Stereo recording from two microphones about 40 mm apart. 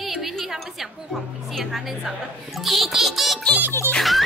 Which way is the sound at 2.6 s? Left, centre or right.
Centre.